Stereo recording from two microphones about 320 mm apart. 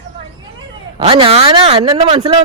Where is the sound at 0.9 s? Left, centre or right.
Centre.